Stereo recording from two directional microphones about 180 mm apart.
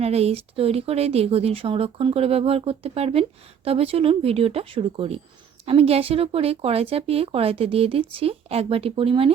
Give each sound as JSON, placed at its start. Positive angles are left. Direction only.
{"t": 0.0, "sound": "speech", "side_deg": -35}